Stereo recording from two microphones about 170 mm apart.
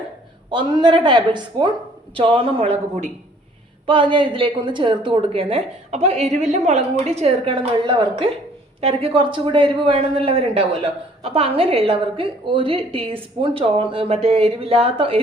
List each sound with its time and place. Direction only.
0.5 s a woman's voice: 25° right (ahead or behind)
3.8 s a woman's voice: 30° right (ahead or behind)